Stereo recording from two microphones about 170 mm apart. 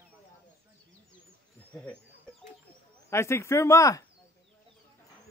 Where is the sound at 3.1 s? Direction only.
15° left (ahead or behind).